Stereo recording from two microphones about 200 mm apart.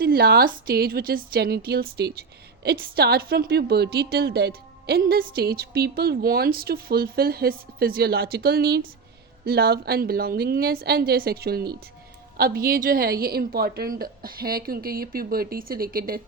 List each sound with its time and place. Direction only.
0.0 s a woman's voice: 50° right (ahead or behind)